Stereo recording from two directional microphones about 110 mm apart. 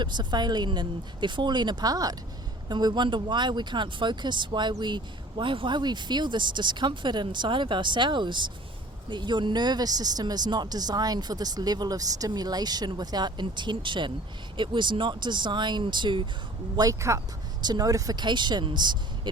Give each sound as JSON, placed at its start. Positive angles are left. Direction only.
{"t": 0.0, "sound": "speech", "side_deg": -40}
{"t": 16.7, "sound": "speech", "side_deg": -30}